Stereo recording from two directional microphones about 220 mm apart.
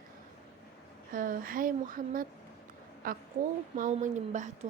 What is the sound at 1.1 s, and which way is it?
A woman's voice, 40° right (ahead or behind).